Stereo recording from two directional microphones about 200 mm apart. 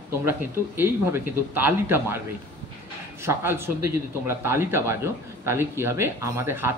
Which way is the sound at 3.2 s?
10° right (ahead or behind).